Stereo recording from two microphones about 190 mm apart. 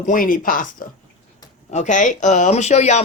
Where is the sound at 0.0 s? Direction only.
45° left (ahead or behind).